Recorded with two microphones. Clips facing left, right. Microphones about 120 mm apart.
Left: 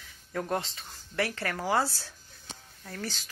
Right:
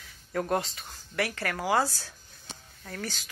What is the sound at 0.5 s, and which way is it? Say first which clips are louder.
Speech: right 3 dB; 25° left (ahead or behind).